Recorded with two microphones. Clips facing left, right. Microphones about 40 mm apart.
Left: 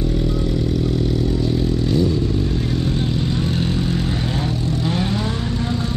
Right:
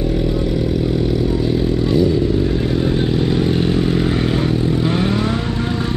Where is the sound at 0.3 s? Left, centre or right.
Centre.